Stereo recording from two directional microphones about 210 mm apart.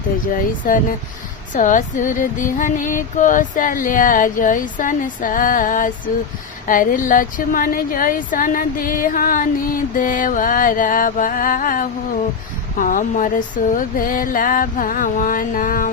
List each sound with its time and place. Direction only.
0.3 s a woman's voice: 40° left (ahead or behind)